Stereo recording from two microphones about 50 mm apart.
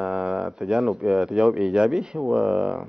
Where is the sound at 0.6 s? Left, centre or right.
Centre.